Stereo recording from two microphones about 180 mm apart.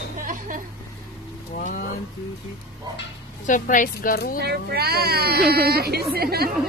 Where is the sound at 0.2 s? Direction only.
45° right (ahead or behind).